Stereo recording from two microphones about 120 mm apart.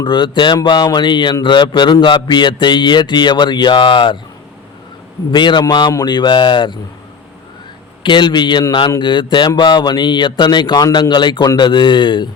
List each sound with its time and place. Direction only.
0.0 s speech: 40° left (ahead or behind)
5.3 s speech: 40° left (ahead or behind)
8.0 s speech: 40° left (ahead or behind)